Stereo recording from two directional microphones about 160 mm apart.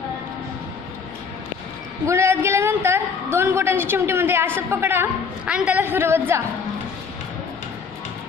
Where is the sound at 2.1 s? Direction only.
15° right (ahead or behind).